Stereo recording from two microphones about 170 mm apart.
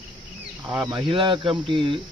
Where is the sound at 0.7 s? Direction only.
25° right (ahead or behind).